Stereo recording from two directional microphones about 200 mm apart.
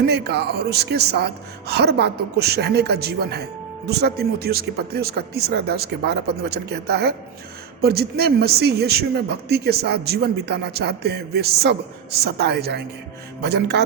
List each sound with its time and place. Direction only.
0.0 s a woman's voice: 55° right (ahead or behind)